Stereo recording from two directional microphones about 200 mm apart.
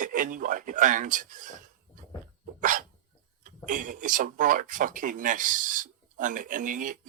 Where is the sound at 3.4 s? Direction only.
40° right (ahead or behind).